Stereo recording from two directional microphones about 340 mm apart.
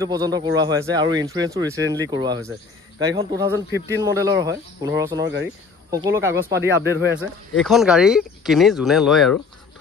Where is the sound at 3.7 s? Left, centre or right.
Right.